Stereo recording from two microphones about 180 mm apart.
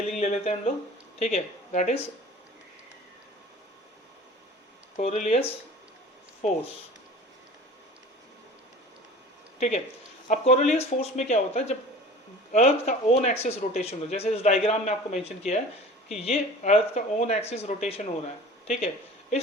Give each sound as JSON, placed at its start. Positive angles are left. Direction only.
{"t": 0.2, "sound": "a man's voice", "side_deg": 40}
{"t": 4.9, "sound": "a man's voice", "side_deg": 40}
{"t": 9.6, "sound": "a man's voice", "side_deg": 40}